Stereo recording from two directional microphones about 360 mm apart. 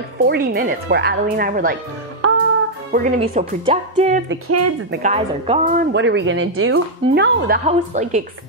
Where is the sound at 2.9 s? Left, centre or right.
Right.